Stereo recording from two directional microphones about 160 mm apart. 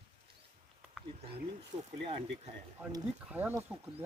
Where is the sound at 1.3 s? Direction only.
35° right (ahead or behind).